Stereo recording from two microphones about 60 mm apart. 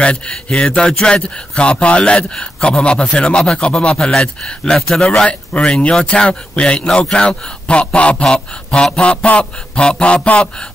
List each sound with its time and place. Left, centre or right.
0.0 s speech: centre